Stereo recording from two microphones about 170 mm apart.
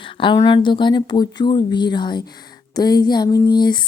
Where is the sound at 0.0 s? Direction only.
30° left (ahead or behind).